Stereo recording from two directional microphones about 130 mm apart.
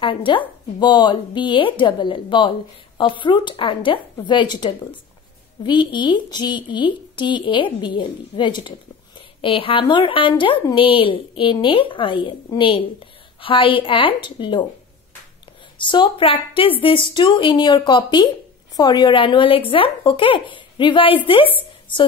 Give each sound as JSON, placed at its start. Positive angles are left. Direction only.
{"t": 0.0, "sound": "speech", "side_deg": 40}
{"t": 15.8, "sound": "a woman's voice", "side_deg": 40}
{"t": 21.5, "sound": "a sound", "side_deg": 40}